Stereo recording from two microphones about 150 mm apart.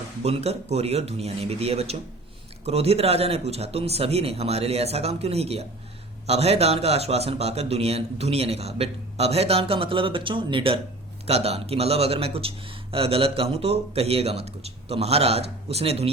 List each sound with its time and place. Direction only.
0.2 s a man's voice: 45° right (ahead or behind)